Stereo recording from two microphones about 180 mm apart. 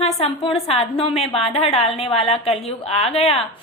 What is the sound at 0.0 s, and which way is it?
A woman's voice, 35° left (ahead or behind).